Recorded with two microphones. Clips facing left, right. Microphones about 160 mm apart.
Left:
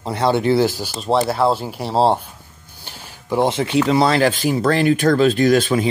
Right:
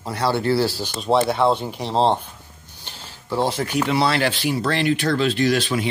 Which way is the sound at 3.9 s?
40° left (ahead or behind).